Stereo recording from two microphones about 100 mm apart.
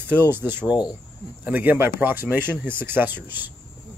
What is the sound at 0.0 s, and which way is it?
Speech, 20° right (ahead or behind).